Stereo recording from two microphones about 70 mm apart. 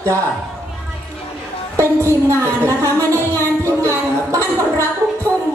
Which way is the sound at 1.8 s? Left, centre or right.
Right.